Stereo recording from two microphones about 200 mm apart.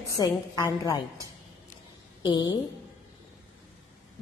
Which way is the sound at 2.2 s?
20° left (ahead or behind).